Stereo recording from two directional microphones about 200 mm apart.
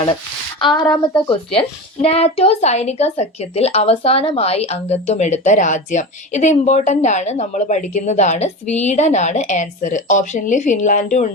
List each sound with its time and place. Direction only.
0.6 s speech: 20° left (ahead or behind); by 11.3 s 40° left (ahead or behind)